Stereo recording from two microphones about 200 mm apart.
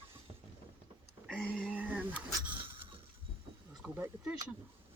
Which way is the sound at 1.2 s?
Centre (ahead or behind).